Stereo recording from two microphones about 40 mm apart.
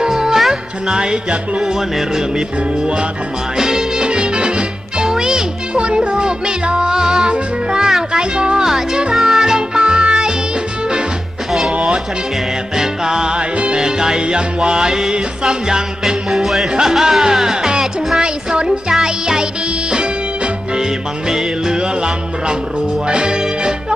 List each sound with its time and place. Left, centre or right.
0.0 s music: centre
0.9 s music: right
1.6 s music: centre
2.8 s music: right
11.7 s music: right
12.7 s music: centre